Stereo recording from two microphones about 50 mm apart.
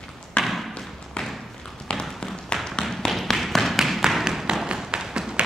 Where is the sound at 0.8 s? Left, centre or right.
Centre.